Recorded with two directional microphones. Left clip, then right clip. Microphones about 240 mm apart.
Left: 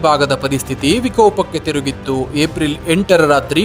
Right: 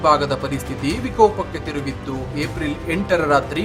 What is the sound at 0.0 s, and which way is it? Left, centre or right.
Speech, left.